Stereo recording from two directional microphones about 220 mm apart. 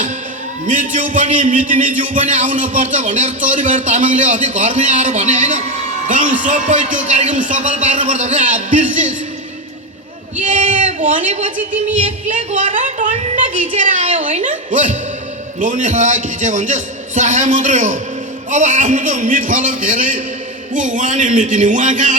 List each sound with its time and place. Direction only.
0.7 s a man's voice: 35° right (ahead or behind)
10.3 s speech: 35° right (ahead or behind)
11.5 s music: 5° right (ahead or behind)
11.9 s a man's voice: 35° right (ahead or behind)